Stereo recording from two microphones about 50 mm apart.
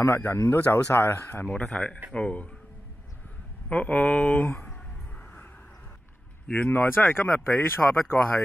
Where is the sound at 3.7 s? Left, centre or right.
Left.